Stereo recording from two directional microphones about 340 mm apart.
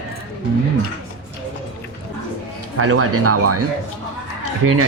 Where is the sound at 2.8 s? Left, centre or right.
Right.